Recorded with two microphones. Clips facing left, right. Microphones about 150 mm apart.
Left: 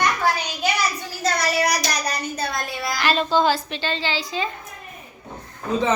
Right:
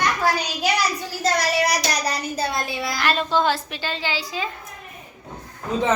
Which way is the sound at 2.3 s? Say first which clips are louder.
Right 2 dB; 25° right (ahead or behind).